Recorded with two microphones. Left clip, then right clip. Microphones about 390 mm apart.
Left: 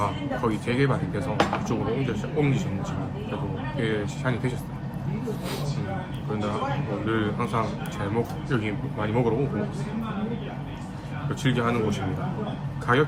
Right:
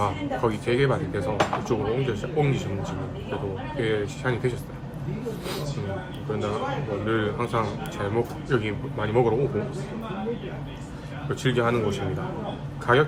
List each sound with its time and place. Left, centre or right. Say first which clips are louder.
0.0 s speech: right 2 dB; centre
3.8 s speech: right 2 dB; centre
7.1 s speech: right 1 dB; centre
11.4 s speech: right 2 dB; centre